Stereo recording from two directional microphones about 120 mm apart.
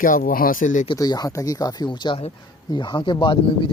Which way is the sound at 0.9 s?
30° left (ahead or behind).